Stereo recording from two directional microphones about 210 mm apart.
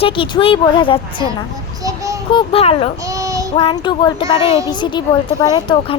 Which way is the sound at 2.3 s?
25° left (ahead or behind).